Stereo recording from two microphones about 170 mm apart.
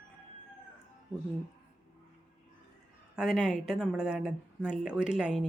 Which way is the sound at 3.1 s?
Centre (ahead or behind).